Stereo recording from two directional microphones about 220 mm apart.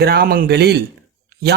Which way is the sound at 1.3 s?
50° right (ahead or behind).